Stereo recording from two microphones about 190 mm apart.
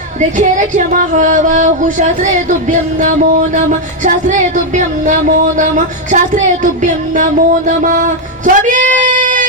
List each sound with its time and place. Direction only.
0.2 s music: 40° right (ahead or behind)
3.5 s music: 40° right (ahead or behind)
8.4 s a sound: 40° right (ahead or behind)